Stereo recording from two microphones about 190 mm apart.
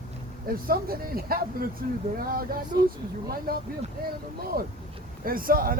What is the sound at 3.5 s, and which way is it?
Speech, 50° right (ahead or behind).